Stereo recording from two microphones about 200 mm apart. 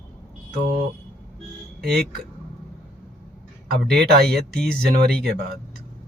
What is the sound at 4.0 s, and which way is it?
Speech, 50° right (ahead or behind).